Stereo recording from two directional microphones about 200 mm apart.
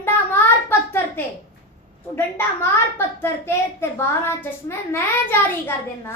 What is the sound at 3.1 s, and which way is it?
A woman's voice, 10° left (ahead or behind).